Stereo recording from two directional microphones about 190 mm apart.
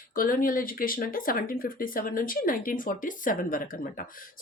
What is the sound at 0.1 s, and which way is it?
Speech, 45° left (ahead or behind).